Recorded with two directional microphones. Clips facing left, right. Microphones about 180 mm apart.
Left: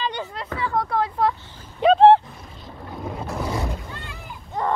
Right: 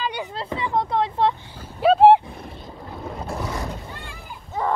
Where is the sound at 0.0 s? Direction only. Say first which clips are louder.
Even; 10° right (ahead or behind).